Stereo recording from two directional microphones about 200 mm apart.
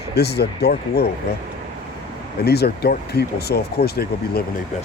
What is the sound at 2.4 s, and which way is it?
Speech, 55° left (ahead or behind).